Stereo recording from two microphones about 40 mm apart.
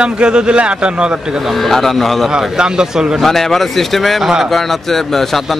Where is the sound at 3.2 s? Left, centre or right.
Centre.